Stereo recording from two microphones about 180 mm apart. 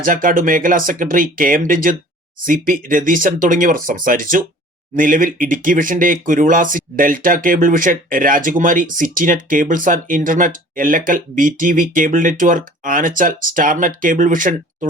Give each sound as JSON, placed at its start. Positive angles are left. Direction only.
{"t": 0.0, "sound": "speech", "side_deg": -50}